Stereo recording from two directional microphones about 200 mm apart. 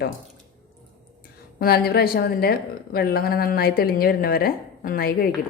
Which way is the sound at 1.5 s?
50° left (ahead or behind).